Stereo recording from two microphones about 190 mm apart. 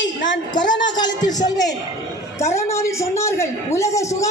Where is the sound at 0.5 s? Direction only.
20° left (ahead or behind).